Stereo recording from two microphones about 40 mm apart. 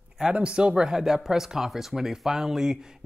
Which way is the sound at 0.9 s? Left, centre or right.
Centre.